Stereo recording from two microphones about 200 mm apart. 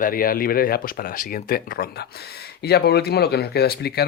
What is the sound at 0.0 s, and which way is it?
Speech, 45° left (ahead or behind).